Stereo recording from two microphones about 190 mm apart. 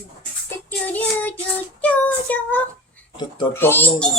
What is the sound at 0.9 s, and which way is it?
A child's voice, 10° left (ahead or behind).